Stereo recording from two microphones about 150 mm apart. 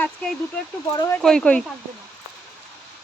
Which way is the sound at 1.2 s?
5° left (ahead or behind).